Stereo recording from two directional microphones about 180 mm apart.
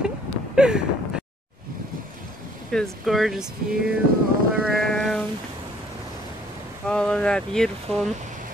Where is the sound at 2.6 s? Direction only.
Centre (ahead or behind).